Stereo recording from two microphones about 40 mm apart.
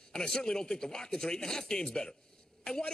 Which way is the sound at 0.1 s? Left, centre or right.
Centre.